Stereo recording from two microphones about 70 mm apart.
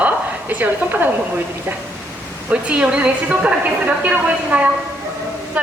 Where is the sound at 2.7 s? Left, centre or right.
Centre.